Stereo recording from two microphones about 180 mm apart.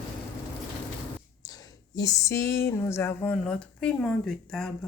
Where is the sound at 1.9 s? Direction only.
20° left (ahead or behind).